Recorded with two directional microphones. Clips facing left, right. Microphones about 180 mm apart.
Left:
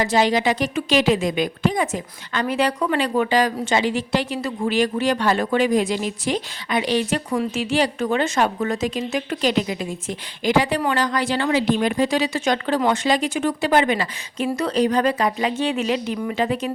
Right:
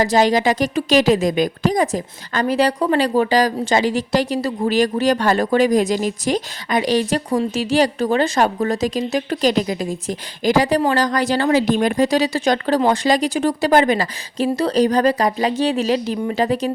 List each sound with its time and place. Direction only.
0.0 s a woman's voice: 40° right (ahead or behind)